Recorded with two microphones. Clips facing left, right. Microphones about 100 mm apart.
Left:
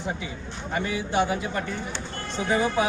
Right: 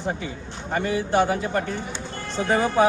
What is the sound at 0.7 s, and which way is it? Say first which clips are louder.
A man's voice: right 4 dB; 45° right (ahead or behind).